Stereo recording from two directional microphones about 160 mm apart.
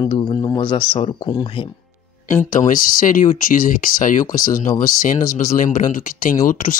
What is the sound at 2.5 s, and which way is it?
Speech, 55° left (ahead or behind).